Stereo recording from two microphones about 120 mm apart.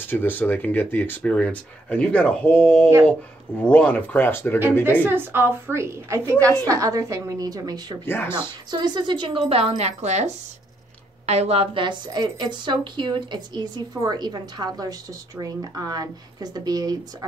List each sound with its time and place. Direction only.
0.0 s speech: 15° left (ahead or behind)
5.0 s a woman's voice: 15° right (ahead or behind); by 8.0 s 35° right (ahead or behind)
8.0 s speech: 20° left (ahead or behind)
8.4 s a woman's voice: 35° right (ahead or behind); by 10.3 s 70° right (ahead or behind)
11.2 s a woman's voice: 60° right (ahead or behind); by 17.0 s 30° right (ahead or behind)